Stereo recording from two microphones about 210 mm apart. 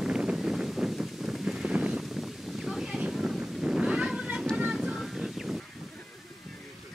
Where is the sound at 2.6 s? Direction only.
Centre (ahead or behind).